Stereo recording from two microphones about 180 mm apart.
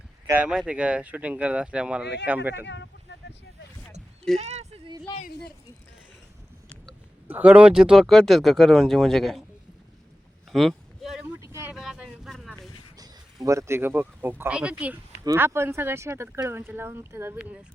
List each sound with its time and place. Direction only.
0.3 s speech: 5° right (ahead or behind)
3.1 s vehicle: 75° left (ahead or behind)
4.4 s speech: 35° right (ahead or behind)
5.1 s a sound: 20° left (ahead or behind)
7.3 s speech: 10° right (ahead or behind)
10.5 s a sound: centre (ahead or behind)
11.3 s vehicle: 15° right (ahead or behind)
11.7 s vehicle: 5° right (ahead or behind)
13.0 s speech: 20° right (ahead or behind)